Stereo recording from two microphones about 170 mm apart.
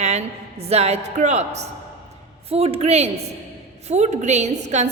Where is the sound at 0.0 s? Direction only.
40° right (ahead or behind).